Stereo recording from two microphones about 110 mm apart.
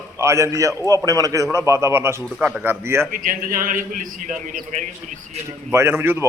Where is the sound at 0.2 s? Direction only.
25° right (ahead or behind).